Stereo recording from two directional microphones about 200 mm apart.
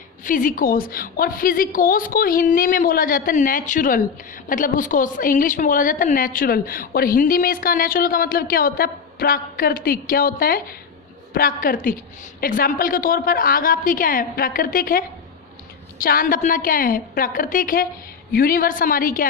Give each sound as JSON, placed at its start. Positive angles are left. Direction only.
{"t": 0.3, "sound": "a woman's voice", "side_deg": 45}